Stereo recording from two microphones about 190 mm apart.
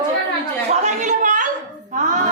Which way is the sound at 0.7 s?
40° right (ahead or behind).